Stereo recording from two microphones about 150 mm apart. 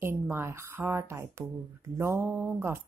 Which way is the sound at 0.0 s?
15° right (ahead or behind).